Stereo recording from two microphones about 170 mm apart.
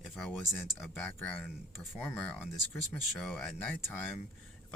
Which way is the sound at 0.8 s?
5° left (ahead or behind).